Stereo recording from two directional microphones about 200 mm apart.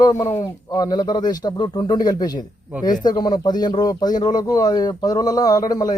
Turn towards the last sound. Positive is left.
turn(degrees=20)  # may be behind; listen again after turning